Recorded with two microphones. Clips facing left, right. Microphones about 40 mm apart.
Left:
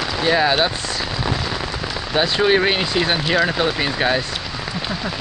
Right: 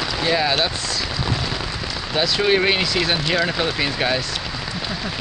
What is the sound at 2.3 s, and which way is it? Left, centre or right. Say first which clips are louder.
Speech: left 1 dB; centre.